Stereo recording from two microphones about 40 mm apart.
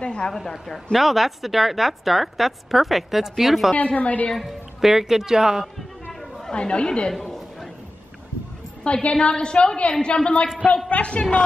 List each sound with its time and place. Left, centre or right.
0.0 s a sound: left
0.9 s a woman's voice: centre
3.7 s a woman's voice: left
4.4 s speech: centre
6.5 s a woman's voice: left
7.1 s a woman's voice: centre
8.8 s a woman's voice: left